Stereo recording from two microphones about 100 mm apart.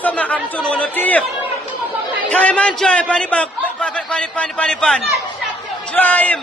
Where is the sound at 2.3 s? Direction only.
15° left (ahead or behind).